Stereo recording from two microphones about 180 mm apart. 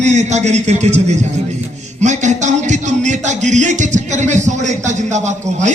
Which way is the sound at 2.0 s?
40° right (ahead or behind).